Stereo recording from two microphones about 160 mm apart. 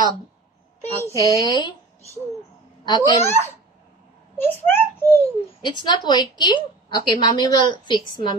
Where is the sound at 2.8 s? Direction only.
25° left (ahead or behind).